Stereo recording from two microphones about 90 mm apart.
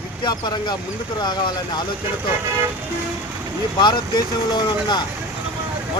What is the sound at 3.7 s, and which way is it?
Speech, 60° left (ahead or behind).